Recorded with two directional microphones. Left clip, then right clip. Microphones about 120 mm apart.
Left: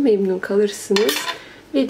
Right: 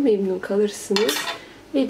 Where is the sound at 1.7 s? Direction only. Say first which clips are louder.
Left 2 dB; 40° left (ahead or behind).